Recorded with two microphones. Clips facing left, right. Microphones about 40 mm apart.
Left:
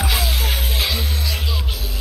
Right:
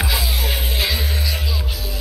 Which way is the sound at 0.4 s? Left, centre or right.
Right.